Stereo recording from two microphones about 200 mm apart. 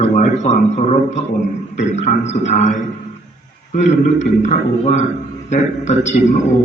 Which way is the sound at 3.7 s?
35° left (ahead or behind).